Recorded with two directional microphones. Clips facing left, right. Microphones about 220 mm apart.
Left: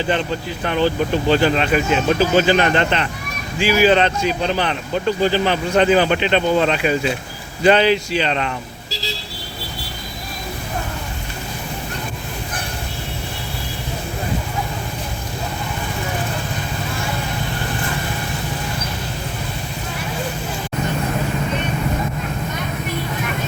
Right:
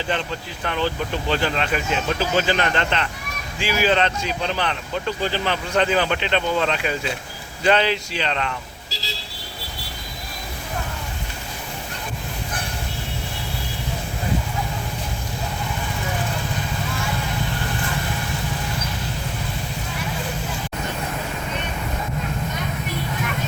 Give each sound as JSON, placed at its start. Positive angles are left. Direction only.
{"t": 0.6, "sound": "speech", "side_deg": 10}